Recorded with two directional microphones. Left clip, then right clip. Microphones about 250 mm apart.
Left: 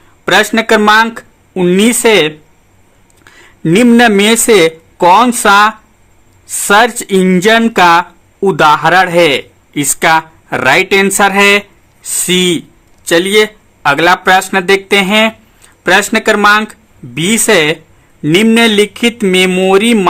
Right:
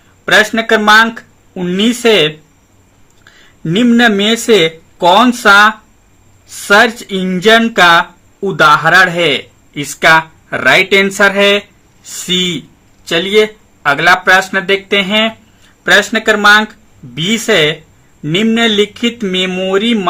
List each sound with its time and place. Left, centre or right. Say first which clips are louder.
0.3 s speech: left 1 dB; left
3.6 s speech: left 3 dB; left